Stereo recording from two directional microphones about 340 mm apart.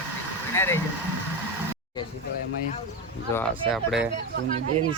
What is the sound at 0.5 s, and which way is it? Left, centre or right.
Speech, centre.